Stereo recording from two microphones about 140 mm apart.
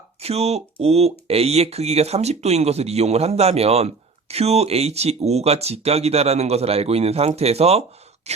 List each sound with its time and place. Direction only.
0.2 s speech: 50° right (ahead or behind)